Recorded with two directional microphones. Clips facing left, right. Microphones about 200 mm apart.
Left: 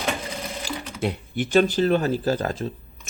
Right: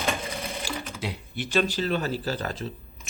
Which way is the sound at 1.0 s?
50° left (ahead or behind).